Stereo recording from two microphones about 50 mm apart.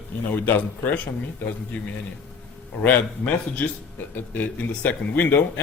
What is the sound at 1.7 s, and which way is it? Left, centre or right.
A man's voice, left.